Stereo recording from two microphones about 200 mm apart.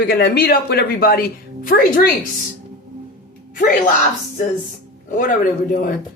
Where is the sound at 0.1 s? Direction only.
50° left (ahead or behind).